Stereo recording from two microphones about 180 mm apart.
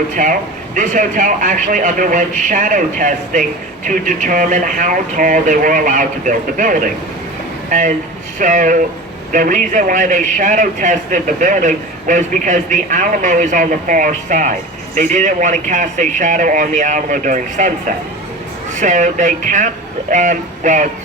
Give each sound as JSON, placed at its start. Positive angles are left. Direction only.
{"t": 0.2, "sound": "a man's voice", "side_deg": -45}